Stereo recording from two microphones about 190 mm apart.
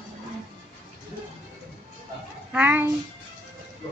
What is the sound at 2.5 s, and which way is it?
Speech, 10° right (ahead or behind).